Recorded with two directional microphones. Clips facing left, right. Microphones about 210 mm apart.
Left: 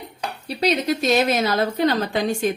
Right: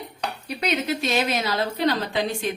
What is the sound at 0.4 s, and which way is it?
A woman's voice, 35° left (ahead or behind).